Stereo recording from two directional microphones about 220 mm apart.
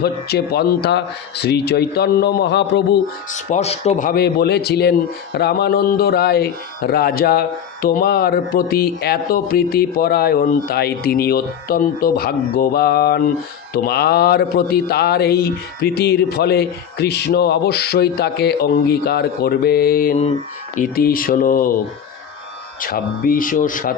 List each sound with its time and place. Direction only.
0.0 s speech: 45° left (ahead or behind)
3.3 s speech: 30° left (ahead or behind)
22.8 s speech: 40° left (ahead or behind)